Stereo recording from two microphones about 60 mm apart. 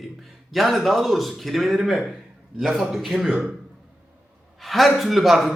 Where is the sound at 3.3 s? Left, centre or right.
Right.